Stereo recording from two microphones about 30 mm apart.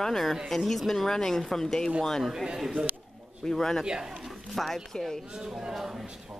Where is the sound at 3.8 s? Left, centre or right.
Right.